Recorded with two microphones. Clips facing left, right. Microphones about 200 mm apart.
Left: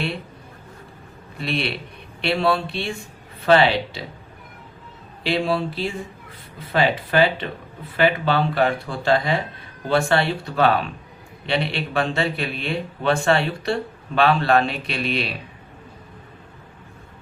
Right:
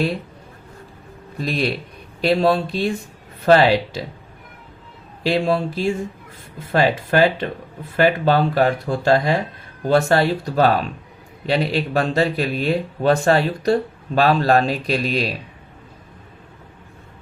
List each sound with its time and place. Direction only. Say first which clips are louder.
1.4 s speech: right 4 dB; 40° right (ahead or behind)
5.2 s speech: right 3 dB; 45° right (ahead or behind)